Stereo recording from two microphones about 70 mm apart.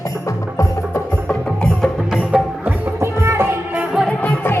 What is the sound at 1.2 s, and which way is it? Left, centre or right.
Music, centre.